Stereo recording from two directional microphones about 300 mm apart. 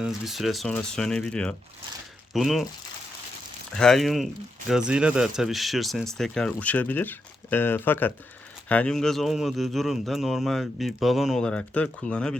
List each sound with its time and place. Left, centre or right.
0.0 s speech: centre
3.8 s speech: centre